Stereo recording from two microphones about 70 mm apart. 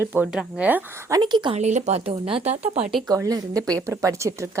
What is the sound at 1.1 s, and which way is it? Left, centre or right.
Speech, right.